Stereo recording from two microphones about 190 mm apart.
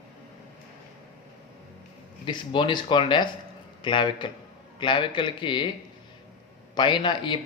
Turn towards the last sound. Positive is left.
turn(degrees=25)  # may be behind; listen again after turning